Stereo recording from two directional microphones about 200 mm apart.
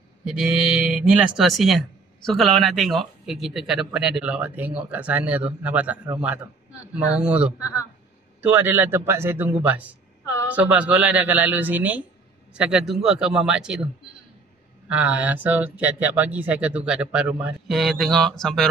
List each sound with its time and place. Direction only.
0.2 s speech: 5° right (ahead or behind)
7.5 s a man's voice: 15° left (ahead or behind)
8.4 s speech: 10° right (ahead or behind)
14.9 s speech: 5° right (ahead or behind)